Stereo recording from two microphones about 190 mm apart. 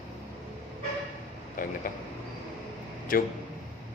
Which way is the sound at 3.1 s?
50° left (ahead or behind).